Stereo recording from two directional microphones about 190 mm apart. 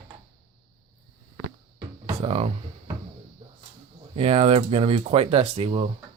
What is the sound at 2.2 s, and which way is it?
Music, 30° right (ahead or behind).